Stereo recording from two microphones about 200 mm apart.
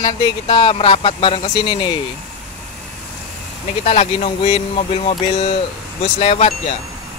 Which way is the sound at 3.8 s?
30° left (ahead or behind).